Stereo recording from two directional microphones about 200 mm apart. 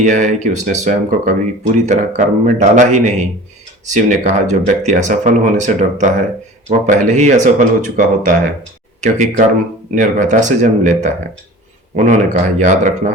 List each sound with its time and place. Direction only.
0.0 s speech: 40° right (ahead or behind)